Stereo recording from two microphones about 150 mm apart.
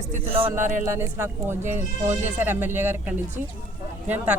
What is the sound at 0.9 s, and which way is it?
Speech, 15° right (ahead or behind).